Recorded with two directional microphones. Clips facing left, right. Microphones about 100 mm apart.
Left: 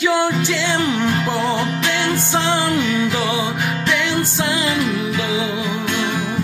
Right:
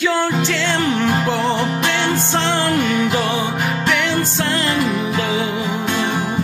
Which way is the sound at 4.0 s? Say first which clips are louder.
Right 1 dB; 10° left (ahead or behind).